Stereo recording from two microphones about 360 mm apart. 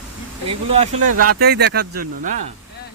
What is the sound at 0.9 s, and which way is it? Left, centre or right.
Speech, right.